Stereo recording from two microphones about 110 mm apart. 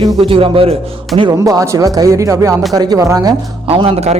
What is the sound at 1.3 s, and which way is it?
Speech, 30° right (ahead or behind).